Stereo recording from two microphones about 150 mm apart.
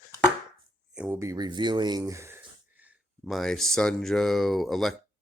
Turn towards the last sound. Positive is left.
turn(degrees=0)  # may be behind; listen again after turning